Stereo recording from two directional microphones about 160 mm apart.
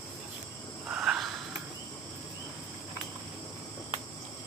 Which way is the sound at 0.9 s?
5° right (ahead or behind).